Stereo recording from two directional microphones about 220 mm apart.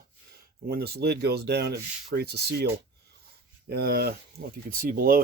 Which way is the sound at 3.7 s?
45° right (ahead or behind).